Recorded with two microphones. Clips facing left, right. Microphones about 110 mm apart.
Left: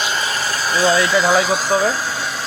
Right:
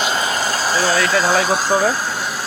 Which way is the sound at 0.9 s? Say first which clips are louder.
Left 3 dB; 25° left (ahead or behind).